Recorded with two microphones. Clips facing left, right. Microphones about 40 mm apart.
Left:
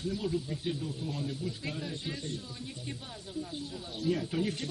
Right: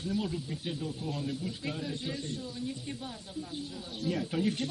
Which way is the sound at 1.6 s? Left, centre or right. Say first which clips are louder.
Right 2 dB; centre.